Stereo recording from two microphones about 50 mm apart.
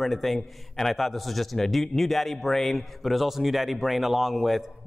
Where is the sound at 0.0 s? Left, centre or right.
Centre.